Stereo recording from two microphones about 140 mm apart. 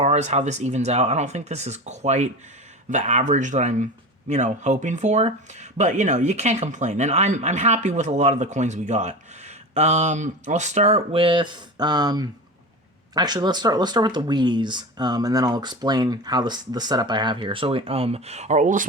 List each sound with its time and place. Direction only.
0.0 s speech: 55° right (ahead or behind)